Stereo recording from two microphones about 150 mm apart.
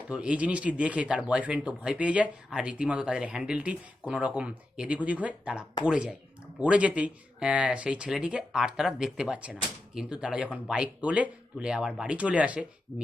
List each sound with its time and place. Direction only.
0.1 s speech: 5° right (ahead or behind)
12.9 s speech: 20° left (ahead or behind)